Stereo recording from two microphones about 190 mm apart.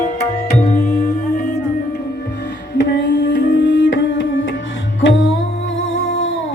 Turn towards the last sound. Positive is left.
turn(degrees=75)  # may be behind; listen again after turning